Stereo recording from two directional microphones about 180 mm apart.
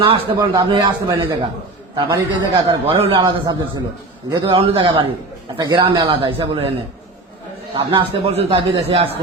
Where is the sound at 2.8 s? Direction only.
30° right (ahead or behind).